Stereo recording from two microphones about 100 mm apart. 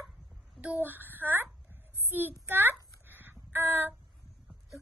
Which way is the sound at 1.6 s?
20° right (ahead or behind).